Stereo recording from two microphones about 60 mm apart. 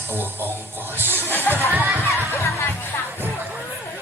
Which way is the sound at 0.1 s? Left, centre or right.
Right.